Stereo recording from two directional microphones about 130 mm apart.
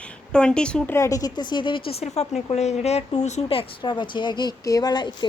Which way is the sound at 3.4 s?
35° left (ahead or behind).